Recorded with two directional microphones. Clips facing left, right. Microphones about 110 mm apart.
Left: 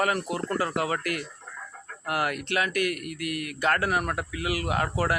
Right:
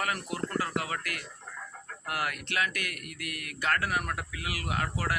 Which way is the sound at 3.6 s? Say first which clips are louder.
Left 4 dB; 35° left (ahead or behind).